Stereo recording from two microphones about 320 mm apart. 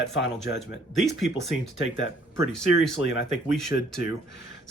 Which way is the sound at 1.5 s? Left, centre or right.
Left.